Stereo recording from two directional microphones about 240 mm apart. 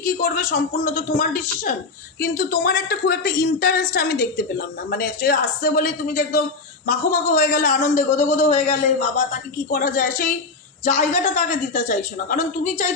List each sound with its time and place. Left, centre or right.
0.0 s a man's voice: left